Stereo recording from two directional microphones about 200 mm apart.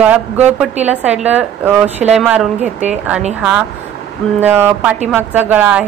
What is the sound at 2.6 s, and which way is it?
Speech, 35° right (ahead or behind).